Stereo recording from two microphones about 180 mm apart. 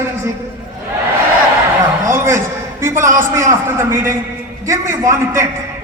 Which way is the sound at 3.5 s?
15° right (ahead or behind).